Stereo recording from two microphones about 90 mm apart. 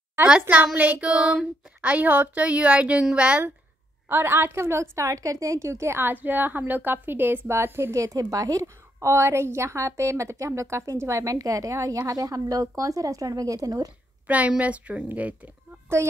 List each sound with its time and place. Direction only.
0.3 s a woman's voice: 15° right (ahead or behind); by 13.9 s 45° right (ahead or behind)
14.2 s speech: 15° right (ahead or behind)